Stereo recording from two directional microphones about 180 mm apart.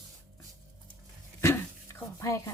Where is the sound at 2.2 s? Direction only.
15° left (ahead or behind).